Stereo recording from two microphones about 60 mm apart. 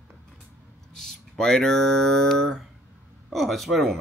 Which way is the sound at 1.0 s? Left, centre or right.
Centre.